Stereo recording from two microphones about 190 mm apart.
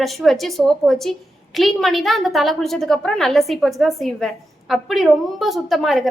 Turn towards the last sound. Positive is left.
turn(degrees=0)  # may be behind; listen again after turning